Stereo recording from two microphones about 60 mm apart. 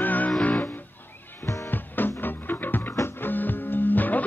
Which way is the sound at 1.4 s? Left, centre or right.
Left.